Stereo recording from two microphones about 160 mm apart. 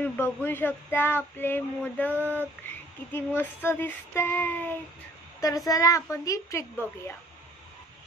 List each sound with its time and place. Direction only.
0.0 s speech: 15° left (ahead or behind)
2.0 s a sound: 15° right (ahead or behind)
3.3 s a child's voice: 15° left (ahead or behind)